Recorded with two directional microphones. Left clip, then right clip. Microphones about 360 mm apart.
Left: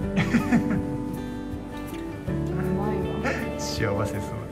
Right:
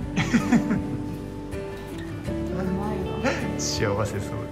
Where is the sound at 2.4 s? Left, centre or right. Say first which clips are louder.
Left 2 dB; centre.